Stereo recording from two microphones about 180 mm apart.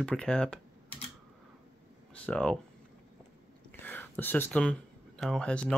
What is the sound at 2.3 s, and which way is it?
Speech, 5° left (ahead or behind).